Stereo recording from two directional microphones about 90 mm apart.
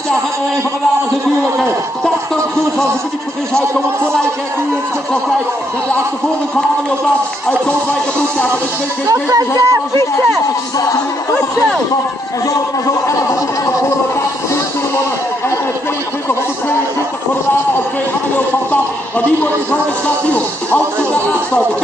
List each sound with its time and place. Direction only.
9.0 s speech: 40° right (ahead or behind)
20.2 s speech: 15° left (ahead or behind)